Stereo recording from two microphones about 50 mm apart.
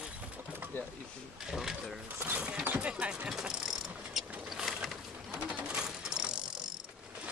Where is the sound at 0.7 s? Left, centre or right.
Left.